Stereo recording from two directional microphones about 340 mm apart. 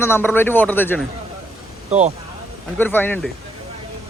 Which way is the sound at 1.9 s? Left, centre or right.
Centre.